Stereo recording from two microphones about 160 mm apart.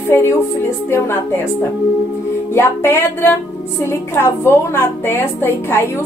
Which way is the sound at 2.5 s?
15° left (ahead or behind).